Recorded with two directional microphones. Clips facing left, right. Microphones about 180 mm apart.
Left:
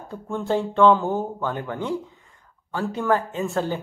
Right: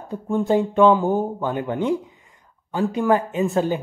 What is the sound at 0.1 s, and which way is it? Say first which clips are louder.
A man's voice: right 5 dB; 15° right (ahead or behind).